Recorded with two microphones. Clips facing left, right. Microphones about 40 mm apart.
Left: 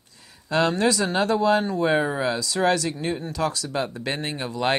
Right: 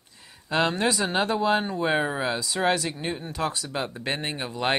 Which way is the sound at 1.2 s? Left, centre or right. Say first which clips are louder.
Left 5 dB; right.